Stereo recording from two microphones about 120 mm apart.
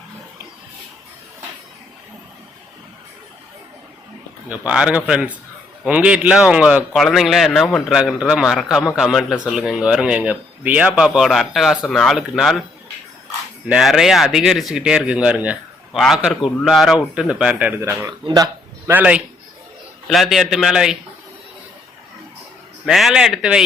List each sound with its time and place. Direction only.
4.4 s a man's voice: 10° right (ahead or behind)
13.7 s speech: 5° right (ahead or behind)
18.0 s speech: 30° right (ahead or behind)
18.9 s a man's voice: 15° right (ahead or behind)
20.1 s speech: centre (ahead or behind)
22.9 s speech: centre (ahead or behind)